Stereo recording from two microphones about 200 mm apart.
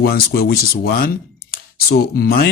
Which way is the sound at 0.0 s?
50° left (ahead or behind).